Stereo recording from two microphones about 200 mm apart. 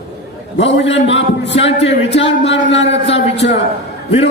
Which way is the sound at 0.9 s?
65° left (ahead or behind).